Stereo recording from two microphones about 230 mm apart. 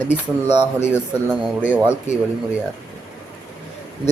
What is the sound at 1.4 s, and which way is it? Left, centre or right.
Speech, centre.